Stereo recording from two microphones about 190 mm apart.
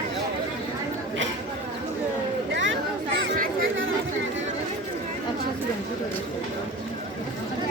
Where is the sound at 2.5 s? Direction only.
80° right.